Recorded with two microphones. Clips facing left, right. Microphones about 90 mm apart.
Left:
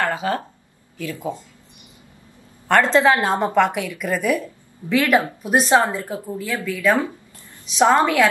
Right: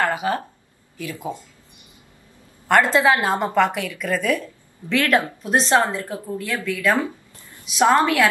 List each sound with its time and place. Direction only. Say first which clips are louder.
0.0 s speech: even; 20° right (ahead or behind)
2.7 s a woman's voice: left 1 dB; 10° right (ahead or behind); by 8.1 s 15° left (ahead or behind)